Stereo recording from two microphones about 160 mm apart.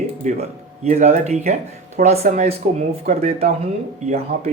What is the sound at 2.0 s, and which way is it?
Speech, 60° right (ahead or behind).